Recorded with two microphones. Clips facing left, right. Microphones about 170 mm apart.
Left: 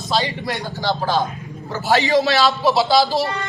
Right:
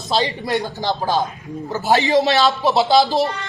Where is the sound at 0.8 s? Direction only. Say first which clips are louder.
Even; 15° right (ahead or behind).